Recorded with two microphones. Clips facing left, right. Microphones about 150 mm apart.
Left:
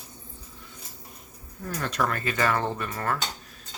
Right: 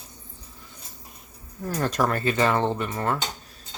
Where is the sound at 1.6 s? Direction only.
40° right (ahead or behind); by 3.2 s 25° right (ahead or behind).